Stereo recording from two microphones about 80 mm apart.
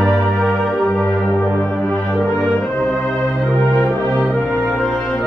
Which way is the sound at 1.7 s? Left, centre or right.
Centre.